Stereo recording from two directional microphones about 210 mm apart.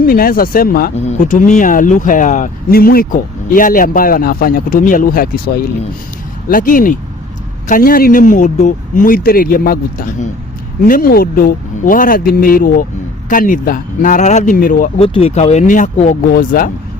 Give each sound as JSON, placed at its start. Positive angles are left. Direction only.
{"t": 0.0, "sound": "speech", "side_deg": 45}
{"t": 0.9, "sound": "speech", "side_deg": 35}
{"t": 6.5, "sound": "speech", "side_deg": 40}
{"t": 14.9, "sound": "speech", "side_deg": 25}